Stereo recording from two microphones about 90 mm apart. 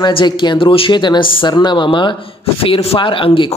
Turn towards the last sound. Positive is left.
turn(degrees=70)  # may be behind; listen again after turning